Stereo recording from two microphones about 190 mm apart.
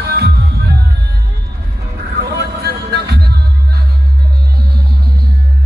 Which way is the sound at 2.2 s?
60° right (ahead or behind).